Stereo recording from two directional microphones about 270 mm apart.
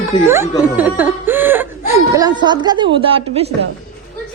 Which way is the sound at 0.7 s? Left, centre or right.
Centre.